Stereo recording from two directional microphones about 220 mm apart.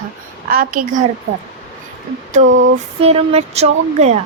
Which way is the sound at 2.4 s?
60° right (ahead or behind).